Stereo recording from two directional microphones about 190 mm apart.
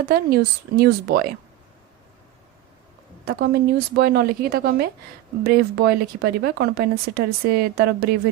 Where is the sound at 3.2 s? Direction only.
55° right (ahead or behind).